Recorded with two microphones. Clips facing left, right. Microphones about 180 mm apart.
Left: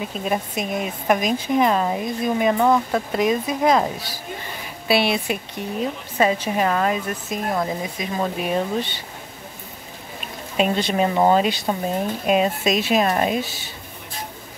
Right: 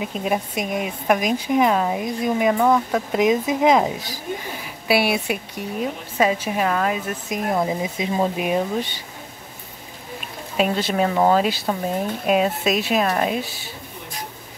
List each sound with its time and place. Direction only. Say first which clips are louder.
0.0 s speech: right 1 dB; 15° right (ahead or behind)
3.1 s speech: right 4 dB; 15° right (ahead or behind)
7.2 s speech: right 3 dB; 15° right (ahead or behind)
10.6 s speech: even; 5° right (ahead or behind)
11.1 s speech: even; 5° left (ahead or behind)
12.3 s speech: even; 5° right (ahead or behind)